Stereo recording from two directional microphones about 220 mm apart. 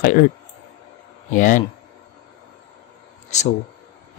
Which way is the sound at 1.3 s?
35° left (ahead or behind).